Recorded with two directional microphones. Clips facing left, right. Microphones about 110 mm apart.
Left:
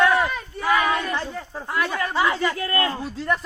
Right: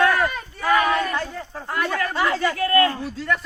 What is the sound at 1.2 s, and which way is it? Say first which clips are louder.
A man's voice: right 1 dB; 20° left (ahead or behind).